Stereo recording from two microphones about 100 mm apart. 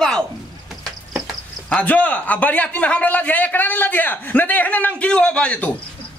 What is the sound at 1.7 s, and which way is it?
A man's voice, 15° left (ahead or behind).